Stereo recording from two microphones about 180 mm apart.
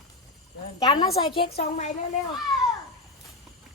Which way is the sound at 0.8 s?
20° left (ahead or behind).